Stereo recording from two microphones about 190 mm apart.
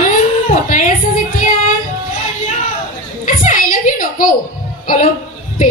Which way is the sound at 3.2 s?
40° left (ahead or behind).